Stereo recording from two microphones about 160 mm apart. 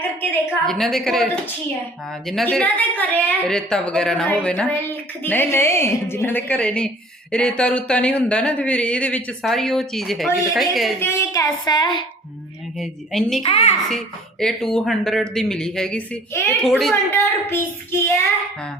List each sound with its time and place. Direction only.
0.2 s a woman's voice: 5° left (ahead or behind)
11.0 s a woman's voice: 15° left (ahead or behind)
12.8 s speech: centre (ahead or behind)
13.4 s a woman's voice: 40° left (ahead or behind)
13.8 s speech: 5° left (ahead or behind)
16.6 s speech: centre (ahead or behind)
16.9 s a woman's voice: 15° left (ahead or behind)